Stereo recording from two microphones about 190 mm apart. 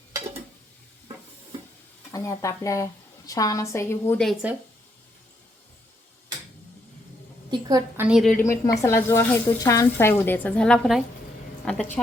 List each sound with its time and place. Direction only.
2.1 s speech: 15° left (ahead or behind)
7.5 s a woman's voice: 20° right (ahead or behind)
7.9 s a woman's voice: 5° right (ahead or behind)
8.3 s a woman's voice: 10° left (ahead or behind)